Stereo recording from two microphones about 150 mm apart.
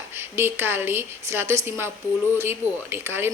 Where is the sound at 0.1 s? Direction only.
15° right (ahead or behind).